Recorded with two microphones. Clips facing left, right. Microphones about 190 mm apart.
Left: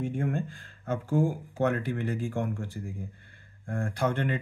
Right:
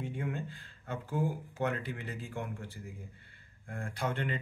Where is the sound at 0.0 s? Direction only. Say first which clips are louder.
Left 7 dB; 45° left (ahead or behind).